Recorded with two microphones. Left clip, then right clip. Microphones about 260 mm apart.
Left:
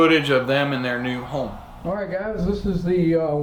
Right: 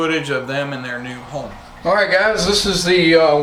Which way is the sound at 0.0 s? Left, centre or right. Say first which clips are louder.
Left 2 dB; centre.